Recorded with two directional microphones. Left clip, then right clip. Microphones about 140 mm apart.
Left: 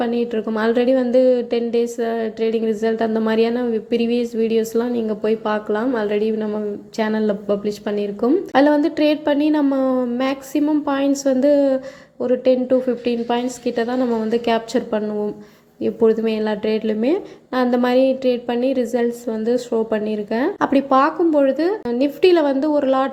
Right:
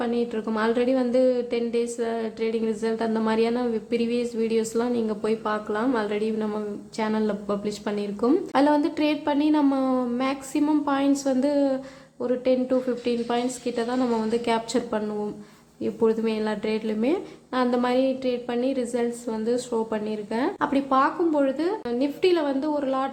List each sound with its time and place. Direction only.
0.0 s a woman's voice: 25° left (ahead or behind)